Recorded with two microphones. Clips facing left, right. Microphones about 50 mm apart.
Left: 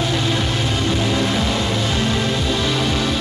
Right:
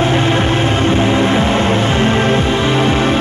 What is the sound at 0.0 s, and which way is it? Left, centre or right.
Music, right.